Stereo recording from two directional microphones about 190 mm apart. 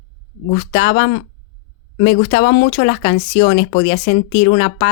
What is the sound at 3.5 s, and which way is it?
Speech, 90° left.